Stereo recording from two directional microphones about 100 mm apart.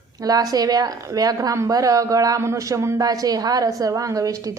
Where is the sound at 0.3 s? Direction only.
40° right (ahead or behind).